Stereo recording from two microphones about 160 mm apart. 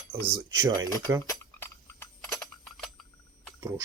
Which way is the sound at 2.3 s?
Centre (ahead or behind).